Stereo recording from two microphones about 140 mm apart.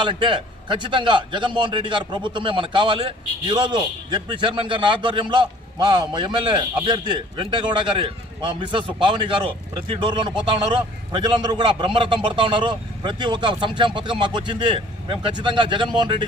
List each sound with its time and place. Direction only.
0.0 s a man's voice: 35° right (ahead or behind)